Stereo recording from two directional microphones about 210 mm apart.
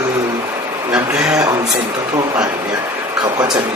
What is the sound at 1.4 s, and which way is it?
Speech, 15° right (ahead or behind).